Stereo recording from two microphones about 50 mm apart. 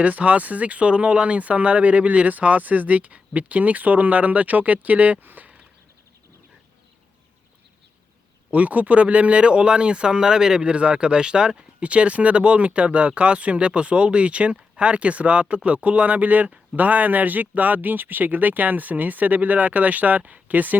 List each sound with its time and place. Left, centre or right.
0.0 s speech: right
8.4 s speech: right